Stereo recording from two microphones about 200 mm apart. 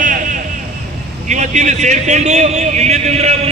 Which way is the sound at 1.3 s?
35° right (ahead or behind).